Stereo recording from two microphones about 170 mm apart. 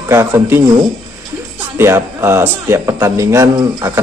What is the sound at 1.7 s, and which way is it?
A man's voice, 15° right (ahead or behind).